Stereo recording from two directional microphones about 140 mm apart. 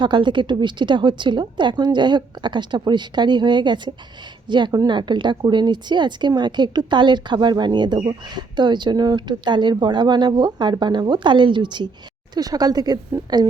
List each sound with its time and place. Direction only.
0.0 s a woman's voice: 35° right (ahead or behind)